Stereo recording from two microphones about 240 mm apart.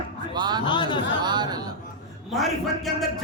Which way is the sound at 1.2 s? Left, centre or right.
Centre.